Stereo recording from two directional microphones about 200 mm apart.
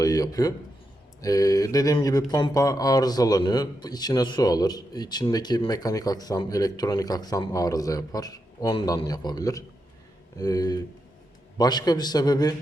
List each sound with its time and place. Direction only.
0.0 s a man's voice: 15° left (ahead or behind)